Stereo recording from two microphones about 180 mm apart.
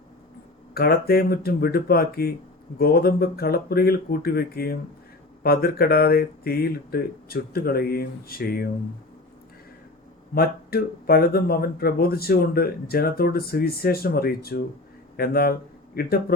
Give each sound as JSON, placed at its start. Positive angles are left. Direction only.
{"t": 0.7, "sound": "speech", "side_deg": 60}
{"t": 10.3, "sound": "speech", "side_deg": 55}